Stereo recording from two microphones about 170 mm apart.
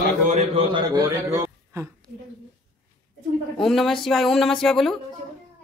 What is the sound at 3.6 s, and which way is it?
Speech, centre (ahead or behind).